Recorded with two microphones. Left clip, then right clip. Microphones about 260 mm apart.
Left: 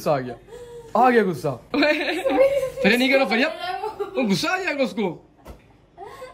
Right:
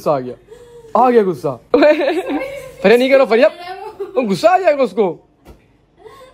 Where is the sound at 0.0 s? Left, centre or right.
Centre.